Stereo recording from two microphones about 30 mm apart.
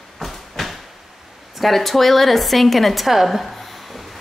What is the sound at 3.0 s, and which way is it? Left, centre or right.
Speech, centre.